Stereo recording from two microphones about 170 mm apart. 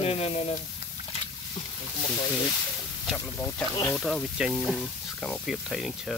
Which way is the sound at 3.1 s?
15° left (ahead or behind).